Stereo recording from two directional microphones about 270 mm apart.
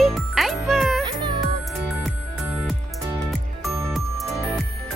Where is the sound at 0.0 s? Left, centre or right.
Centre.